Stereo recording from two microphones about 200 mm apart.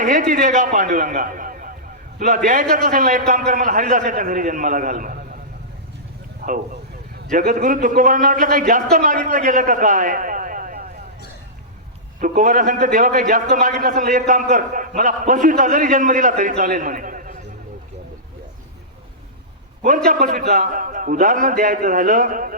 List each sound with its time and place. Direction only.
0.0 s a man's voice: 40° right (ahead or behind)
6.4 s a man's voice: 50° right (ahead or behind)
12.2 s a man's voice: 40° right (ahead or behind)
20.1 s a man's voice: 45° right (ahead or behind)